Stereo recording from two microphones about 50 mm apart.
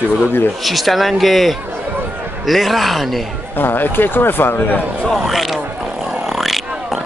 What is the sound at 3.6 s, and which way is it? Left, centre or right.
A man's voice, left.